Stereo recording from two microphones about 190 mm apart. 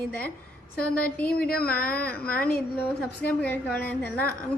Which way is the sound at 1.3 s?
50° left (ahead or behind).